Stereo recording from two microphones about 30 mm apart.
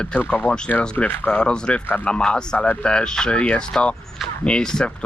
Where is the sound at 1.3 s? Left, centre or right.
Left.